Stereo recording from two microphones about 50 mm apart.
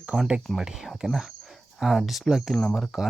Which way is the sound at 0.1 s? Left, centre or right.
Centre.